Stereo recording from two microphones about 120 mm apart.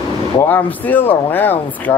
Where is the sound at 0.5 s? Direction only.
15° left (ahead or behind).